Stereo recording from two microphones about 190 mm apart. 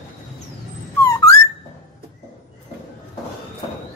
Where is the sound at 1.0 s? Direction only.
15° left (ahead or behind).